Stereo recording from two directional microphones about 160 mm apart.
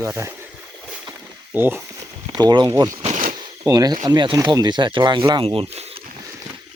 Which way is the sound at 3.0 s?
50° right (ahead or behind).